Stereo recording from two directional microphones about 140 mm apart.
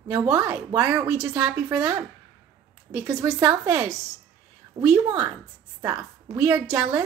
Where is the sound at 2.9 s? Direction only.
20° right (ahead or behind).